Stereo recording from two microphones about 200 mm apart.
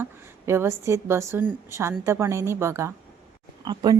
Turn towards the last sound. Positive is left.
turn(degrees=-20)  # may be behind; listen again after turning